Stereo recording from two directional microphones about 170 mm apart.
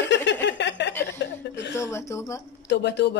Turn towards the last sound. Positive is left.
turn(degrees=85)